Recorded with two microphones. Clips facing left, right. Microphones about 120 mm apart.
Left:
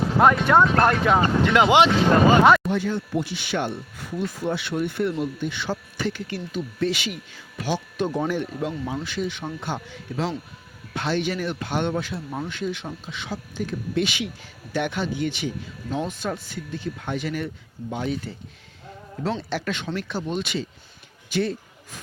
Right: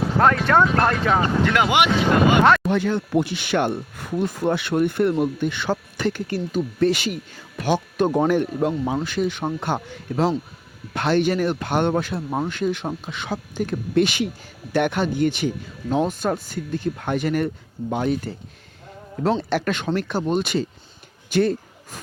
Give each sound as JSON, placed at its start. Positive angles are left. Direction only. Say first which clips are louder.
{"t": 0.2, "sound": "speech", "louder": "even", "side_deg": 10}
{"t": 1.4, "sound": "speech", "louder": "left 2 dB", "side_deg": 20}
{"t": 2.6, "sound": "speech", "louder": "right 4 dB", "side_deg": -65}